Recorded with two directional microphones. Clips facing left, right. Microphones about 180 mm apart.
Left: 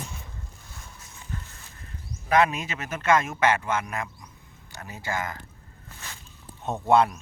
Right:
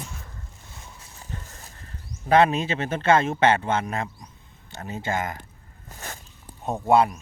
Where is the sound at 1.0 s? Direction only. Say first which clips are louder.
Left 1 dB; 35° right (ahead or behind).